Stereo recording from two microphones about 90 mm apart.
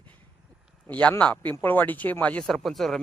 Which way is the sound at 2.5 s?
Centre (ahead or behind).